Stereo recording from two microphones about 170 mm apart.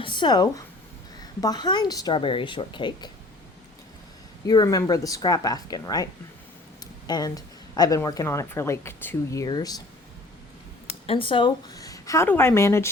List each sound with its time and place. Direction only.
0.0 s speech: 30° left (ahead or behind)
4.4 s speech: 20° left (ahead or behind)
7.1 s speech: 20° left (ahead or behind)
11.0 s a woman's voice: 35° left (ahead or behind); by 12.9 s 15° left (ahead or behind)